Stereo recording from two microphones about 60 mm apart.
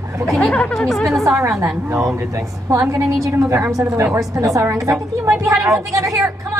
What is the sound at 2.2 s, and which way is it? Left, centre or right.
Speech, right.